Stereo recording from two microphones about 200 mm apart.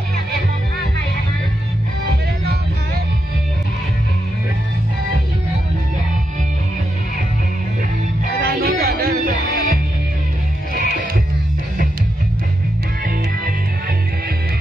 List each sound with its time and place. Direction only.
8.4 s music: 50° right (ahead or behind)
10.8 s music: 45° right (ahead or behind)